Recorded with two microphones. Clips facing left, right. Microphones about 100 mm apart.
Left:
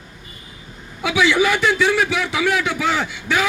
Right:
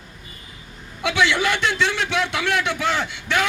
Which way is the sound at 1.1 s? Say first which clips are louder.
Left 3 dB; 10° left (ahead or behind).